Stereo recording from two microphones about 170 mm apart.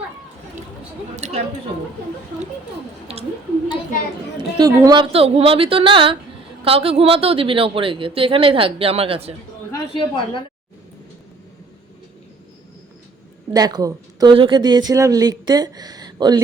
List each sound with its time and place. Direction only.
1.1 s speech: 40° right (ahead or behind)
3.1 s speech: 35° right (ahead or behind)
4.5 s a woman's voice: 25° right (ahead or behind)
9.7 s a woman's voice: 30° left (ahead or behind)
13.5 s a woman's voice: 25° right (ahead or behind)